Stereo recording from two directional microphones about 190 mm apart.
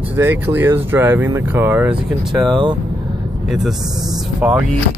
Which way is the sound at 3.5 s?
Centre (ahead or behind).